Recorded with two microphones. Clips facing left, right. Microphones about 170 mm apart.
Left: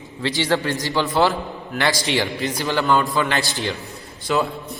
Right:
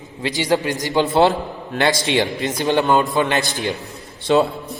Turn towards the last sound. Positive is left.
turn(degrees=-30)  # may be behind; listen again after turning